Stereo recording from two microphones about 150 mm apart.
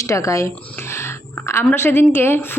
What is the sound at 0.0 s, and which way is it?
A woman's voice, 20° left (ahead or behind).